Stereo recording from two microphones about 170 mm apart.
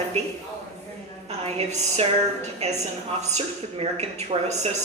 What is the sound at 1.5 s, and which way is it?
A woman's voice, 40° right (ahead or behind).